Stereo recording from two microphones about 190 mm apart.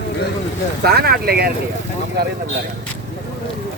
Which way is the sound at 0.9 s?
55° right (ahead or behind).